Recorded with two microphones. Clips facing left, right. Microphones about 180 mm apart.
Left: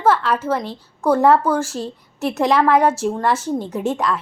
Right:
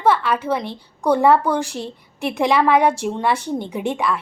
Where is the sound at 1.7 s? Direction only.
10° right (ahead or behind).